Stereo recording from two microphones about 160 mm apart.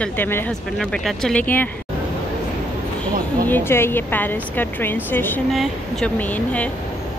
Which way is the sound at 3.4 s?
15° left (ahead or behind).